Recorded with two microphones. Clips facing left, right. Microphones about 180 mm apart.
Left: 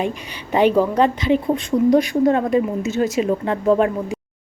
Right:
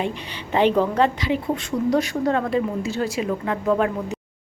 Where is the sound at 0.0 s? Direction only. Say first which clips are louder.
Left 3 dB; 10° left (ahead or behind); by 3.9 s 30° left (ahead or behind).